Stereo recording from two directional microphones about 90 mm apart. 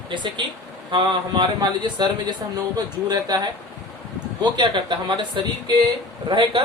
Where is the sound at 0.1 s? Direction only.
60° right (ahead or behind).